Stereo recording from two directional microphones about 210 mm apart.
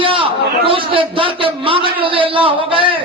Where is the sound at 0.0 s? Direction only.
25° right (ahead or behind).